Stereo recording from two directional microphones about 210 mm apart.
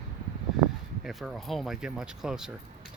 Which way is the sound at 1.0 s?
Centre (ahead or behind).